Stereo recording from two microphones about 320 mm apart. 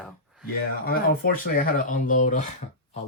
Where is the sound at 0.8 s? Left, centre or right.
Left.